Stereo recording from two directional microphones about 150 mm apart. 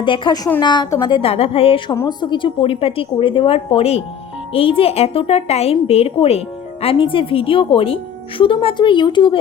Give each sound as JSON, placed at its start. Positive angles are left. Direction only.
{"t": 0.0, "sound": "a woman's voice", "side_deg": 30}
{"t": 1.9, "sound": "a woman's voice", "side_deg": 30}